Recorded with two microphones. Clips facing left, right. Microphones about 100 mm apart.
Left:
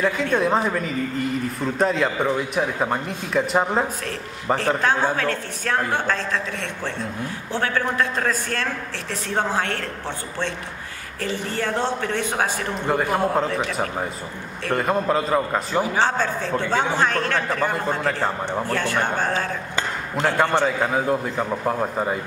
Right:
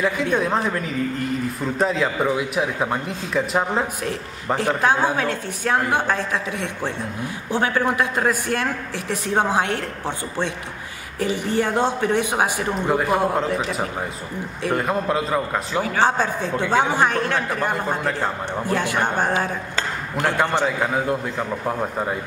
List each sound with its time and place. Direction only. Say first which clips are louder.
0.0 s a man's voice: even; centre (ahead or behind)
4.6 s a man's voice: right 3 dB; 15° right (ahead or behind)
12.9 s a man's voice: even; 5° right (ahead or behind)
16.0 s a man's voice: right 2 dB; 15° right (ahead or behind)
20.2 s a man's voice: left 1 dB; centre (ahead or behind)